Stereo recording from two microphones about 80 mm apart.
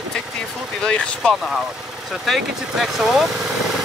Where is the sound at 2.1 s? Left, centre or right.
Centre.